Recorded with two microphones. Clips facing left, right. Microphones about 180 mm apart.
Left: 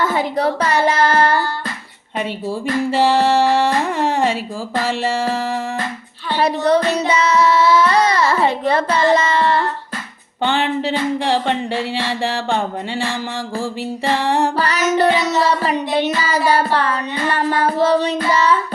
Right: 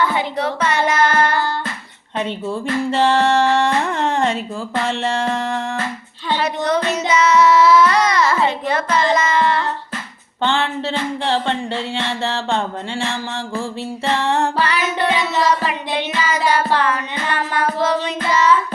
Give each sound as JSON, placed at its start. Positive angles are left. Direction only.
{"t": 0.0, "sound": "child singing", "side_deg": 40}
{"t": 2.6, "sound": "music", "side_deg": 10}
{"t": 6.4, "sound": "child singing", "side_deg": 35}
{"t": 10.4, "sound": "music", "side_deg": 15}
{"t": 14.6, "sound": "music", "side_deg": 40}